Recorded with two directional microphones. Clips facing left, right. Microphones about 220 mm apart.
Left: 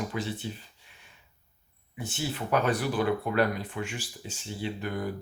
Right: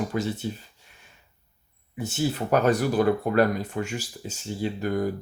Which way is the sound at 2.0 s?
40° right (ahead or behind).